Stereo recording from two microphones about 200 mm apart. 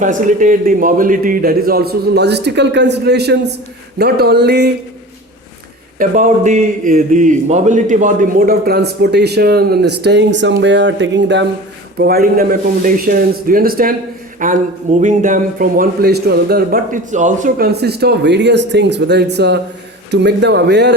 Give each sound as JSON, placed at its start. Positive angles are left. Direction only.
{"t": 0.0, "sound": "a man's voice", "side_deg": -40}
{"t": 6.0, "sound": "a man's voice", "side_deg": -40}
{"t": 11.9, "sound": "a man's voice", "side_deg": -50}